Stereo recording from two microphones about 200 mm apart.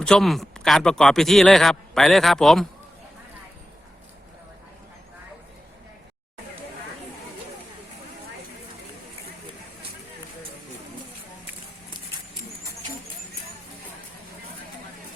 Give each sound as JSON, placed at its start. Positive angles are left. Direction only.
{"t": 0.0, "sound": "a man's voice", "side_deg": 0}